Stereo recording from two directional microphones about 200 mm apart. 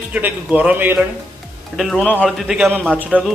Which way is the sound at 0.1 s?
10° right (ahead or behind).